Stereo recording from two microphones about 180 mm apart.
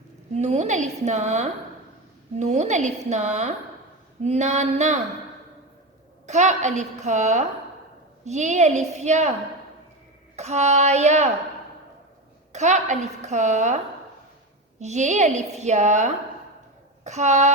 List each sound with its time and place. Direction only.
0.3 s a woman's voice: 40° right (ahead or behind)
6.2 s a woman's voice: 40° right (ahead or behind)
10.3 s a woman's voice: 40° right (ahead or behind)
12.5 s a woman's voice: 40° right (ahead or behind)